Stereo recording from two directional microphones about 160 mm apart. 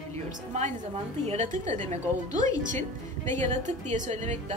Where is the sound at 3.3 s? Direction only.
45° right (ahead or behind).